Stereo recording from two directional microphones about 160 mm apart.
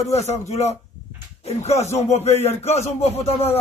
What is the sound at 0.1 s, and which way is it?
A man's voice, 45° left (ahead or behind).